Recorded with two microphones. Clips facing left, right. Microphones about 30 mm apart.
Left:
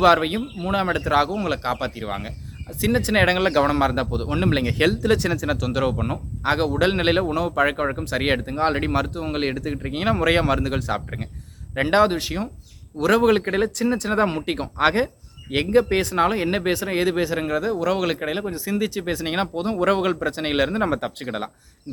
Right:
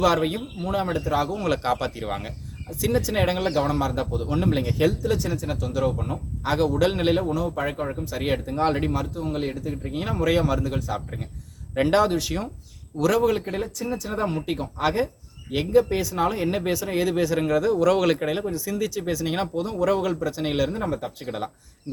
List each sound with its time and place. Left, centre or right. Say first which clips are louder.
0.0 s speech: left 5 dB; left
1.4 s speech: even; centre
2.6 s speech: left 2 dB; left
3.1 s speech: left 5 dB; left
6.4 s speech: left 1 dB; left
8.5 s speech: right 1 dB; left
8.9 s speech: left 3 dB; left
11.7 s speech: left 2 dB; left
13.2 s speech: left 5 dB; left
17.4 s speech: right 2 dB; centre
18.5 s speech: left 2 dB; left
21.2 s speech: right 1 dB; left